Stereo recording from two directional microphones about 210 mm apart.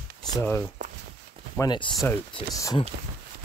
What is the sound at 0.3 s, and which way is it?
Speech, 10° left (ahead or behind).